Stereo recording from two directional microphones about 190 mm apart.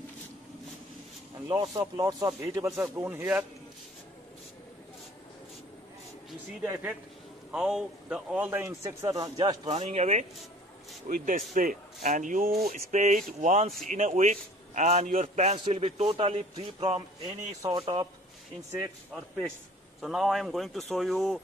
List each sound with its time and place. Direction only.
1.5 s a man's voice: 20° right (ahead or behind)
6.6 s a man's voice: 10° right (ahead or behind)
9.7 s a man's voice: 35° right (ahead or behind)
11.1 s a man's voice: 45° right (ahead or behind); by 18.0 s 25° right (ahead or behind)
19.1 s speech: 5° left (ahead or behind)